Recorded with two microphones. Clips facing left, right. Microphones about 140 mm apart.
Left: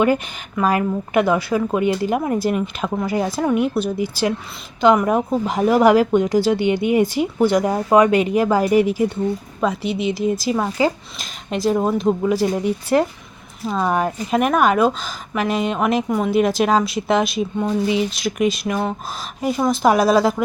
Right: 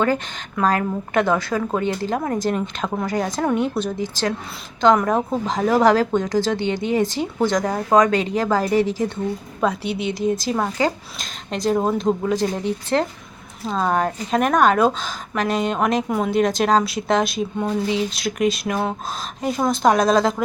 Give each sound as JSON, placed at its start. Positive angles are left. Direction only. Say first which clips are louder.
{"t": 0.5, "sound": "speech", "louder": "left 2 dB", "side_deg": 10}
{"t": 9.6, "sound": "a woman's voice", "louder": "even", "side_deg": 0}